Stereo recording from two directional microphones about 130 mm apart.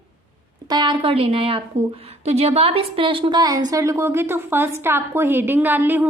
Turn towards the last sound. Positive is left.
turn(degrees=-15)  # may be behind; listen again after turning